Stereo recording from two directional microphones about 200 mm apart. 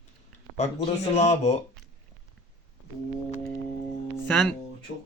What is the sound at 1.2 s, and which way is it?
Speech, 35° left (ahead or behind).